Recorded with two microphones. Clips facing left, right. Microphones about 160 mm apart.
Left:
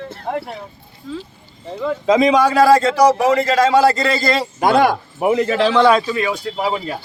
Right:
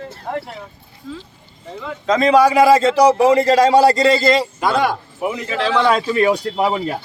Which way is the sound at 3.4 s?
35° right (ahead or behind).